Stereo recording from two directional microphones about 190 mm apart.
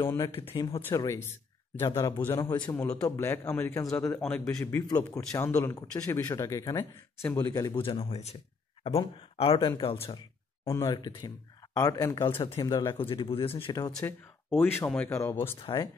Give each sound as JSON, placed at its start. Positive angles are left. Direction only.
{"t": 0.0, "sound": "speech", "side_deg": 15}
{"t": 0.6, "sound": "speech", "side_deg": 30}
{"t": 0.8, "sound": "a man's voice", "side_deg": 15}
{"t": 4.6, "sound": "speech", "side_deg": 15}
{"t": 7.8, "sound": "speech", "side_deg": 30}
{"t": 10.0, "sound": "a sound", "side_deg": 30}
{"t": 10.7, "sound": "speech", "side_deg": 20}
{"t": 12.3, "sound": "speech", "side_deg": 30}
{"t": 13.9, "sound": "speech", "side_deg": 5}
{"t": 15.5, "sound": "speech", "side_deg": 25}